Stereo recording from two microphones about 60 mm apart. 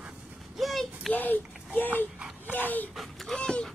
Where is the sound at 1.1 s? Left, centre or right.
Left.